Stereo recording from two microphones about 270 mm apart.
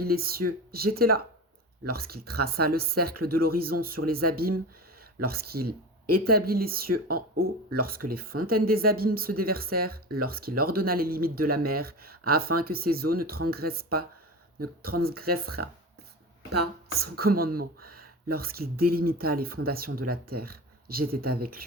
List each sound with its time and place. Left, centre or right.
0.0 s speech: right
2.9 s speech: right
3.2 s speech: right
17.0 s speech: right